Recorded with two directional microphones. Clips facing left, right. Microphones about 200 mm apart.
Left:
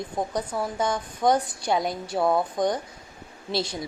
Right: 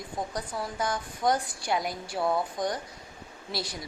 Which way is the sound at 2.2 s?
50° left (ahead or behind).